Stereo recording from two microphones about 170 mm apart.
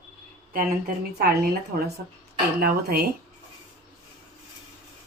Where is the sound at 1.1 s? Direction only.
60° right (ahead or behind).